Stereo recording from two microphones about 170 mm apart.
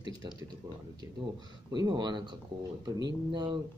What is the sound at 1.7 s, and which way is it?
A man's voice, 25° right (ahead or behind).